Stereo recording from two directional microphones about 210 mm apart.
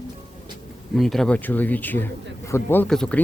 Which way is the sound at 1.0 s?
Centre (ahead or behind).